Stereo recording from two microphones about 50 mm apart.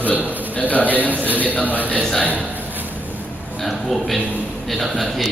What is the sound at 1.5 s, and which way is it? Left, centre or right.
Speech, left.